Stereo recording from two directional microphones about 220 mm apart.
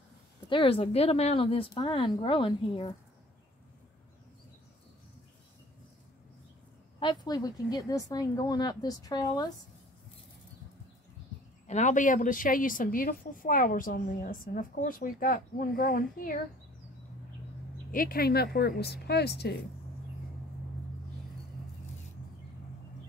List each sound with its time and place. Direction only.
0.5 s speech: 25° left (ahead or behind)
7.0 s a woman's voice: 20° left (ahead or behind)
11.6 s a woman's voice: 35° left (ahead or behind)
17.9 s a woman's voice: 40° left (ahead or behind)